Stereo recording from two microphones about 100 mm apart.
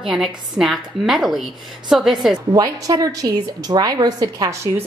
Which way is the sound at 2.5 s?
35° right (ahead or behind).